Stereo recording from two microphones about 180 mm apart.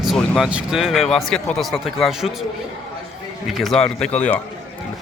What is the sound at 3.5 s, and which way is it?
Speech, centre (ahead or behind).